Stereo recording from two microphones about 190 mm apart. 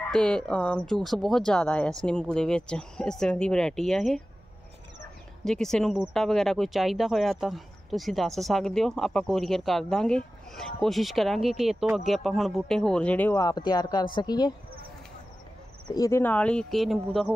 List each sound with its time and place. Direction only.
0.1 s speech: 5° left (ahead or behind)
5.4 s speech: centre (ahead or behind); by 14.5 s 20° left (ahead or behind)
15.9 s speech: 15° left (ahead or behind); by 17.3 s centre (ahead or behind)